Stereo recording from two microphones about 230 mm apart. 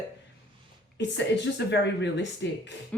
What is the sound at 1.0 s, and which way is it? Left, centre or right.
A woman's voice, left.